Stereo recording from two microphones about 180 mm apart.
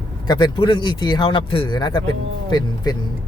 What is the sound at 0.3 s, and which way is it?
Speech, 25° left (ahead or behind).